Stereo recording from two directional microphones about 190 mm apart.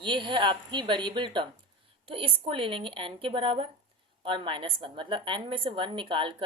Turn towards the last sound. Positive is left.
turn(degrees=-25)  # may be behind; listen again after turning